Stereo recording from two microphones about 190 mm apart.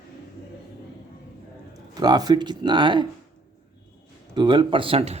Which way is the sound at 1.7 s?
20° right (ahead or behind).